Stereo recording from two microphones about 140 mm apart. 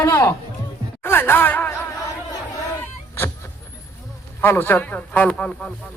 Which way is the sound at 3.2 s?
20° left (ahead or behind).